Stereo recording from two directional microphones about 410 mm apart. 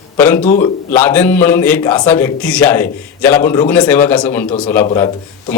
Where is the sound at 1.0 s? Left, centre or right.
Centre.